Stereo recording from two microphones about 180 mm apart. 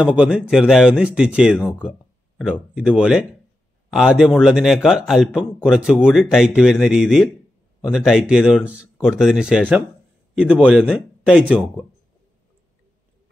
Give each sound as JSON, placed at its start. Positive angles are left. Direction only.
{"t": 0.0, "sound": "a man's voice", "side_deg": -5}